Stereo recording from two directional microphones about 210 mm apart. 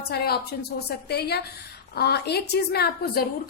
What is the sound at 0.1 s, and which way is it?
A woman's voice, 50° left (ahead or behind).